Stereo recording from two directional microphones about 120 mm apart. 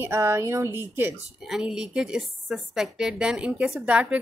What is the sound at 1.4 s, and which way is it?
A woman's voice, 5° right (ahead or behind).